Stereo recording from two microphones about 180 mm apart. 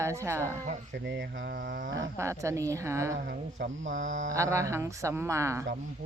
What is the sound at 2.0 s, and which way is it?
Speech, 15° right (ahead or behind).